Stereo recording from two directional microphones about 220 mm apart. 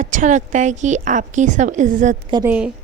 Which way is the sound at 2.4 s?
5° right (ahead or behind).